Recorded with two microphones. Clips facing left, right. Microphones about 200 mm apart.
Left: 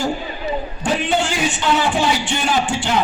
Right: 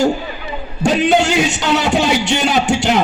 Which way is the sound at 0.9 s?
75° right (ahead or behind).